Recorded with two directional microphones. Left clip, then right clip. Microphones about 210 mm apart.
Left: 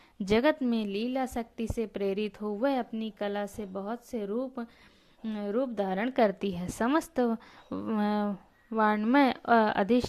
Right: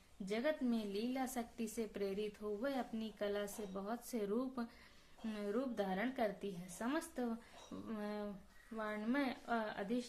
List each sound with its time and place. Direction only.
0.3 s a woman's voice: 40° left (ahead or behind)